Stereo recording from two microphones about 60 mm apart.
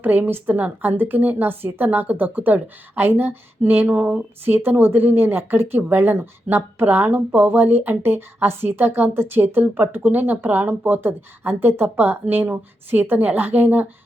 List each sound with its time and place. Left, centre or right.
0.0 s speech: right